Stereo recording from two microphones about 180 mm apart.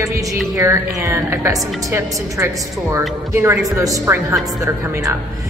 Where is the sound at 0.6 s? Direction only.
15° right (ahead or behind).